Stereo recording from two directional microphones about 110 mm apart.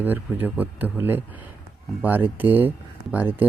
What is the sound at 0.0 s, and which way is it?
Speech, 15° right (ahead or behind).